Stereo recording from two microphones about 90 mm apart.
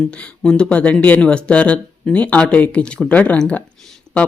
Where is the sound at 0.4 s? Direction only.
10° left (ahead or behind).